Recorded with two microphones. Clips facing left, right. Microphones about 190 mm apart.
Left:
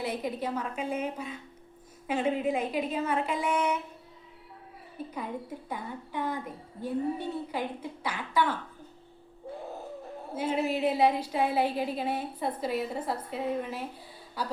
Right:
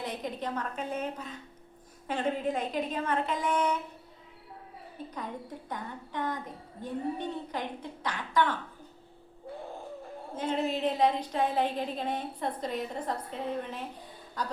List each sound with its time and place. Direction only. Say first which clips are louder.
0.0 s a woman's voice: left 3 dB; 10° left (ahead or behind)
5.1 s a woman's voice: left 3 dB; 10° left (ahead or behind)
10.3 s a woman's voice: left 2 dB; 10° left (ahead or behind)